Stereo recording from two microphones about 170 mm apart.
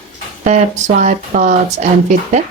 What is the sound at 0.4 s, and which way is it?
Speech, 45° right (ahead or behind).